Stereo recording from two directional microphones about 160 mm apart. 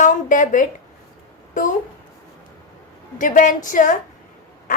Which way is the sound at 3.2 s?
55° left (ahead or behind).